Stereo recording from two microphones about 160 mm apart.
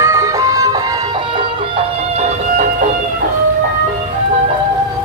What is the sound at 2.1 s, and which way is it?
Music, 45° right (ahead or behind).